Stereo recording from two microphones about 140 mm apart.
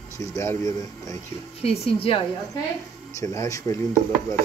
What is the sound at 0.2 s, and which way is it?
Speech, 20° left (ahead or behind).